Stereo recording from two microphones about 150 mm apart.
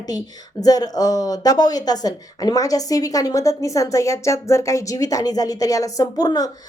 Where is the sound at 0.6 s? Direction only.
25° left (ahead or behind).